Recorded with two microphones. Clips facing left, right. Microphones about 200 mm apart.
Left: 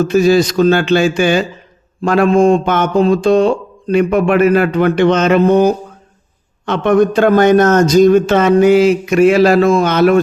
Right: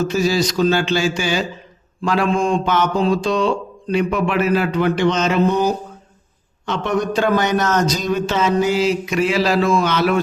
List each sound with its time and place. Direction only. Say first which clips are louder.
0.0 s speech: left 7 dB; 55° left (ahead or behind)